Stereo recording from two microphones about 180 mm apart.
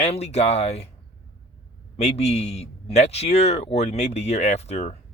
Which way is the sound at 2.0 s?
35° left (ahead or behind).